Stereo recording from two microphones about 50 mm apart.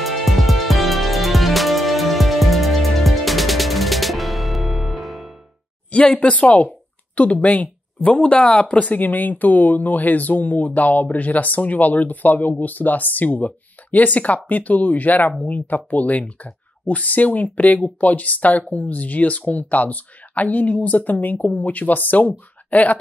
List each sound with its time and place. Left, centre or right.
0.0 s music: centre
5.9 s speech: left